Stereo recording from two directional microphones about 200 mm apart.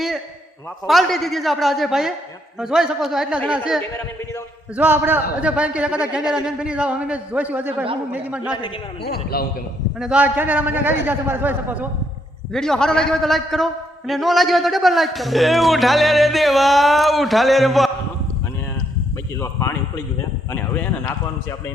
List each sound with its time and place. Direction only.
0.9 s a man's voice: centre (ahead or behind)
4.8 s a man's voice: 10° right (ahead or behind)
9.0 s a man's voice: 50° left (ahead or behind)
10.0 s a man's voice: 5° right (ahead or behind)
12.5 s a man's voice: 5° left (ahead or behind)
19.4 s speech: 15° left (ahead or behind)